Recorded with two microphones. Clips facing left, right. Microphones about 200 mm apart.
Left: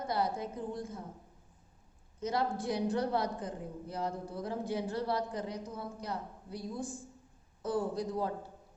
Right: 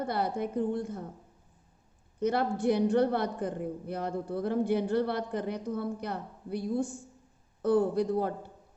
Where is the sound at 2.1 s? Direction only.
60° right (ahead or behind).